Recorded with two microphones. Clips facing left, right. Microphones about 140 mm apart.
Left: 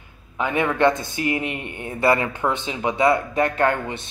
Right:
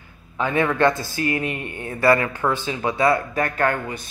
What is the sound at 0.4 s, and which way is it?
A man's voice, 20° left (ahead or behind).